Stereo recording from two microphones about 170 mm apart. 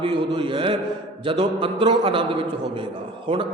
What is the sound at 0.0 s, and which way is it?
A man's voice, 30° right (ahead or behind).